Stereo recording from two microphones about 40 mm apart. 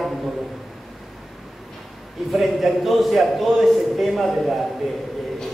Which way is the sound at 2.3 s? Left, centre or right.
Centre.